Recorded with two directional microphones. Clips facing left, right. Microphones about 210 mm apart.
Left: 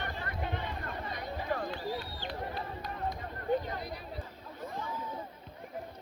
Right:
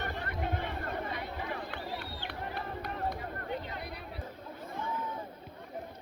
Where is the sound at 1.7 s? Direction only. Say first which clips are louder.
Left 3 dB; 60° right (ahead or behind).